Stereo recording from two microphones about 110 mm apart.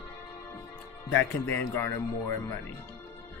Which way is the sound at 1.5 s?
20° left (ahead or behind).